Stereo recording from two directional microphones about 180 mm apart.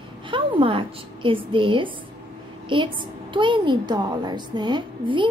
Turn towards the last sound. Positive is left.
turn(degrees=-25)  # may be behind; listen again after turning